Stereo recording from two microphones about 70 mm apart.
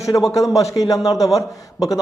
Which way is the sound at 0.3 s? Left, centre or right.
Left.